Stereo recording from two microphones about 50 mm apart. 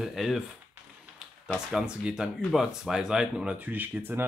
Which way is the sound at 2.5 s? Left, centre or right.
Centre.